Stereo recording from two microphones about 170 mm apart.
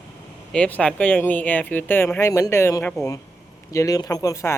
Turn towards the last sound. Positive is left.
turn(degrees=20)  # may be behind; listen again after turning